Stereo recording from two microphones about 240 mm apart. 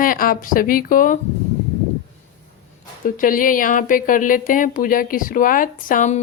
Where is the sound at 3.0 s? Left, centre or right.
Left.